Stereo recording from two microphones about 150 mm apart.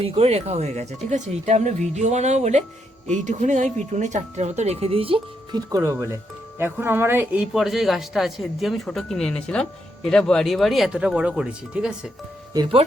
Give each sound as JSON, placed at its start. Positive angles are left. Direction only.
{"t": 0.0, "sound": "speech", "side_deg": -45}
{"t": 12.5, "sound": "speech", "side_deg": -35}